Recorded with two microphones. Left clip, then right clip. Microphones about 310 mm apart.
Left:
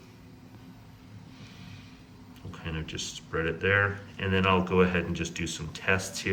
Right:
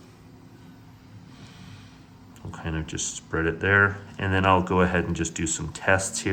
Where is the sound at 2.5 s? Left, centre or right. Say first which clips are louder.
Right 5 dB; centre.